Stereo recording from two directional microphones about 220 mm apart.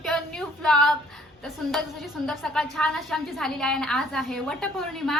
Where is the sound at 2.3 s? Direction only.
Centre (ahead or behind).